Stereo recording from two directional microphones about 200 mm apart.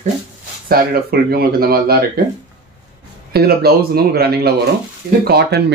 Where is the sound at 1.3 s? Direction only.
50° right (ahead or behind).